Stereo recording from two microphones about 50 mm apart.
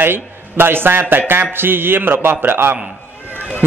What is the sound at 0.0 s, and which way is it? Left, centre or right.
A man's voice, right.